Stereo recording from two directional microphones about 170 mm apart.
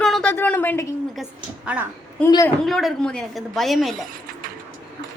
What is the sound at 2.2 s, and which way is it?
Speech, 20° left (ahead or behind).